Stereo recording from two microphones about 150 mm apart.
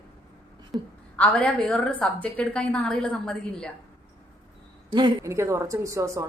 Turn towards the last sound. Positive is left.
turn(degrees=-20)  # may be behind; listen again after turning